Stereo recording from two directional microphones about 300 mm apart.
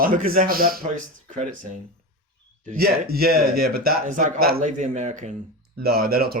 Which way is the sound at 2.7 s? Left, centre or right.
Right.